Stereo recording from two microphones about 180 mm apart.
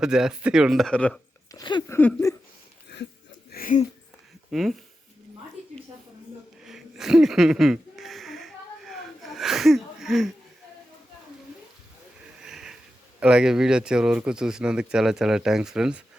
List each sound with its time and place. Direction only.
0.0 s speech: 5° right (ahead or behind)
1.5 s speech: 25° left (ahead or behind)
1.9 s speech: 10° left (ahead or behind)
2.9 s a sound: 75° left (ahead or behind)
3.5 s a sound: 50° left (ahead or behind)
4.5 s speech: centre (ahead or behind)
6.7 s a sound: centre (ahead or behind)
12.4 s sniff: 5° right (ahead or behind)
13.1 s speech: 5° right (ahead or behind)